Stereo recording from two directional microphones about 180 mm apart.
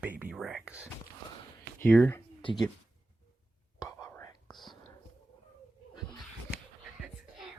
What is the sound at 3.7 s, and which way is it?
Whispering, 20° left (ahead or behind).